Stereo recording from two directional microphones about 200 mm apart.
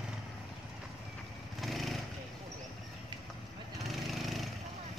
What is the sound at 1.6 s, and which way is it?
Vehicle, centre (ahead or behind).